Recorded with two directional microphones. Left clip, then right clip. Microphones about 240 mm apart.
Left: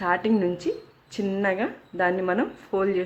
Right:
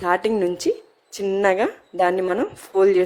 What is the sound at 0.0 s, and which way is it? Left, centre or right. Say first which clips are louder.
A woman's voice: right 4 dB; right.